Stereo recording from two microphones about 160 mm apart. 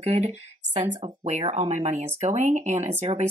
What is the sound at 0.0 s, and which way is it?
Speech, 40° right (ahead or behind).